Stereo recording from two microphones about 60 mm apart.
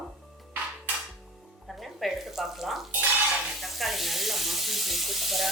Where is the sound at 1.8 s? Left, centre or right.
Centre.